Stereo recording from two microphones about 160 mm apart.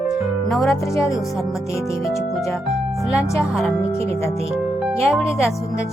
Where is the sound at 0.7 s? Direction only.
20° left (ahead or behind).